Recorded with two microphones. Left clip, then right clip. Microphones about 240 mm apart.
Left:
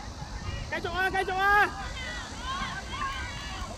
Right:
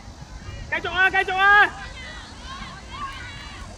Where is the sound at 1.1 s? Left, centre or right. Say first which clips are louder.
Right 7 dB; right.